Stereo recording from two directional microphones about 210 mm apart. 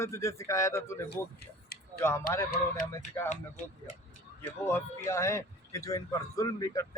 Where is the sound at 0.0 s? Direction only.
15° left (ahead or behind).